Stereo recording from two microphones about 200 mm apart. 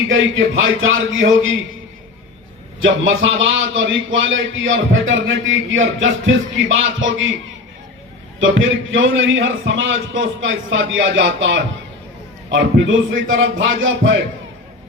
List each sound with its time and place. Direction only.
0.1 s a man's voice: 80° right
2.8 s a man's voice: 75° right (ahead or behind)
8.4 s a man's voice: 75° right (ahead or behind)